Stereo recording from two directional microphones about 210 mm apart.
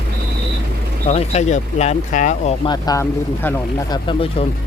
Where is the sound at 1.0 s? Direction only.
30° left (ahead or behind).